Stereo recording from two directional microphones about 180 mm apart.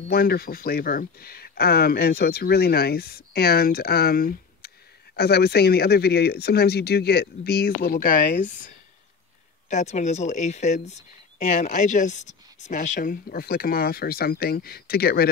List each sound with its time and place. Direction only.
0.1 s speech: 60° left (ahead or behind)